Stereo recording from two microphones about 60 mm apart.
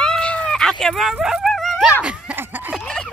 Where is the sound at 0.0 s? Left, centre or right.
Centre.